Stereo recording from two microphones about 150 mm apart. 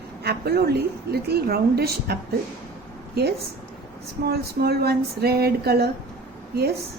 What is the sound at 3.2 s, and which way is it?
A woman's voice, 90° right.